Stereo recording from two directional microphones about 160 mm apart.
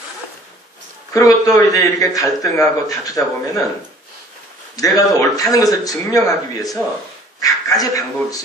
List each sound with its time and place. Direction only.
1.1 s a man's voice: 20° left (ahead or behind)
4.7 s a man's voice: 20° left (ahead or behind)